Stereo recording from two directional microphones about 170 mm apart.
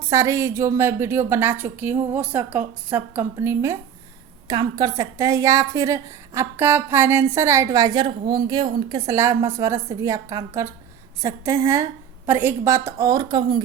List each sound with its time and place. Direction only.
0.1 s a woman's voice: 15° right (ahead or behind)